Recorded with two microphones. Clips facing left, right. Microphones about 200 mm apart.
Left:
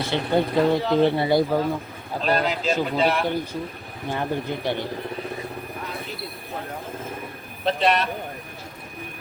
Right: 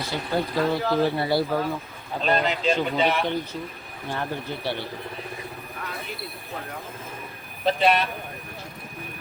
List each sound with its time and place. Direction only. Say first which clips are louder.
0.0 s speech: left 5 dB; 25° left (ahead or behind)
2.2 s speech: even; centre (ahead or behind)
4.1 s speech: left 4 dB; 15° left (ahead or behind)
7.6 s speech: even; centre (ahead or behind)